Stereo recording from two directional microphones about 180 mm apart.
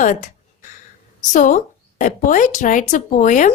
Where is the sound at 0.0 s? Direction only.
45° left (ahead or behind).